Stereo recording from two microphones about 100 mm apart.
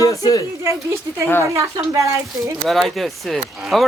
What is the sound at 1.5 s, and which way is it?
Speech, 35° right (ahead or behind).